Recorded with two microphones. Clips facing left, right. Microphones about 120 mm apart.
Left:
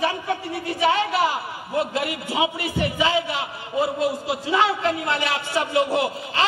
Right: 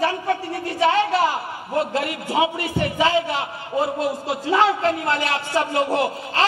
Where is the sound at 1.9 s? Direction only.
45° right (ahead or behind).